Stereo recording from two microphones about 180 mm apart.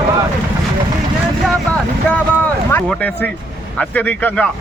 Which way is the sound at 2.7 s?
10° left (ahead or behind).